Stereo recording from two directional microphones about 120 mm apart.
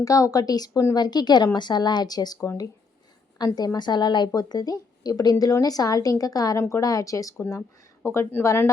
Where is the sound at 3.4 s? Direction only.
35° left (ahead or behind).